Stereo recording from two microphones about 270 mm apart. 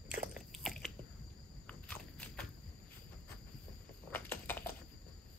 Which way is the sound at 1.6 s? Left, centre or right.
Centre.